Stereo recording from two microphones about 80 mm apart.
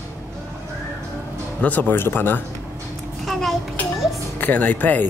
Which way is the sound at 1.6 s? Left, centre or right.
Left.